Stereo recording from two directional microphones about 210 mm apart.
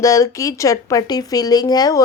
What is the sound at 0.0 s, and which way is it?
Speech, 15° left (ahead or behind).